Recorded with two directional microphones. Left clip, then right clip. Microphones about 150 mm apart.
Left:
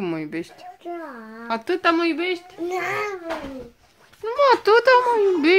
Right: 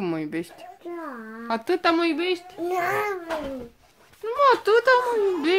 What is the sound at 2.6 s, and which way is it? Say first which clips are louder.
Speech: right 1 dB; 60° right (ahead or behind).